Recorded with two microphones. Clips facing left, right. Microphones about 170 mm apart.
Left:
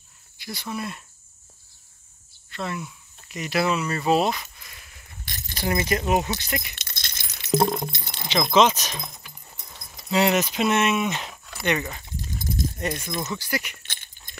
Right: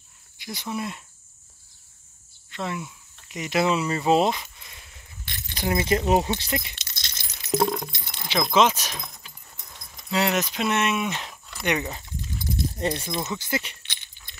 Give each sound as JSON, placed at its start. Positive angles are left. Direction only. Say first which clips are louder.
{"t": 0.4, "sound": "speech", "louder": "right 1 dB", "side_deg": -15}
{"t": 2.5, "sound": "speech", "louder": "even", "side_deg": -15}
{"t": 5.2, "sound": "keys jangling", "louder": "left 1 dB", "side_deg": 40}
{"t": 5.6, "sound": "speech", "louder": "right 1 dB", "side_deg": -20}
{"t": 6.7, "sound": "keys jangling", "louder": "left 2 dB", "side_deg": 55}
{"t": 7.4, "sound": "keys jangling", "louder": "left 2 dB", "side_deg": 25}
{"t": 8.5, "sound": "speech", "louder": "left 2 dB", "side_deg": -5}
{"t": 10.1, "sound": "speech", "louder": "left 3 dB", "side_deg": 0}
{"t": 11.6, "sound": "speech", "louder": "left 1 dB", "side_deg": -15}
{"t": 12.2, "sound": "dog", "louder": "left 1 dB", "side_deg": 45}
{"t": 12.7, "sound": "speech", "louder": "right 2 dB", "side_deg": -30}
{"t": 13.8, "sound": "keys jangling", "louder": "left 1 dB", "side_deg": 50}